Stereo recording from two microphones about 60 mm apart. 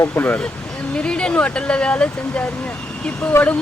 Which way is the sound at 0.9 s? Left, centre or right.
Centre.